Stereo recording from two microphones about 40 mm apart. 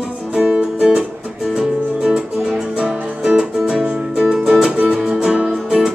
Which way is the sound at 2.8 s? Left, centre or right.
Centre.